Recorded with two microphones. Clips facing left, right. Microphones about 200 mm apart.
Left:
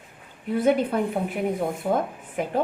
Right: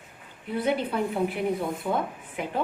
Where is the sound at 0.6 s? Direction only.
45° left (ahead or behind).